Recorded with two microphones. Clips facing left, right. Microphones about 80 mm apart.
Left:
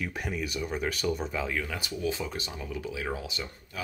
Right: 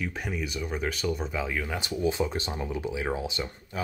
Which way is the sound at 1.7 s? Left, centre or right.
Right.